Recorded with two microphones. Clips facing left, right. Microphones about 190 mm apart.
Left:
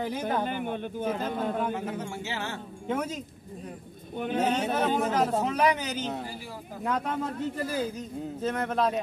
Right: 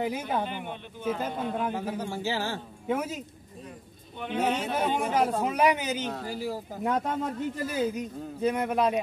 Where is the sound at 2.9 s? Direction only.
5° right (ahead or behind).